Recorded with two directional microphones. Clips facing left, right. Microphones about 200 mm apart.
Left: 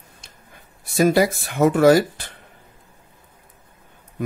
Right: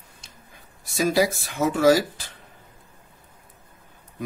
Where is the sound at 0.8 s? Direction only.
55° left (ahead or behind).